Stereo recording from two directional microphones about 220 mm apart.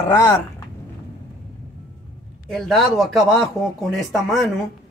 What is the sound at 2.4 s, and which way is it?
Speech, centre (ahead or behind).